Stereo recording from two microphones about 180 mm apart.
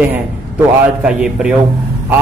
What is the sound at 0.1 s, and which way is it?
A man's voice, 5° right (ahead or behind).